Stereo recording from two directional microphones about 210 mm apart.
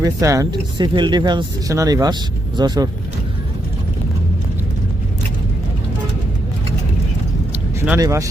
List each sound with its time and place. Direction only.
0.0 s speech: 15° right (ahead or behind)
7.9 s speech: 15° right (ahead or behind)